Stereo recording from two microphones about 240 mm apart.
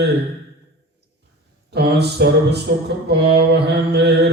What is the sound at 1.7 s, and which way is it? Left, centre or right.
Mantra, right.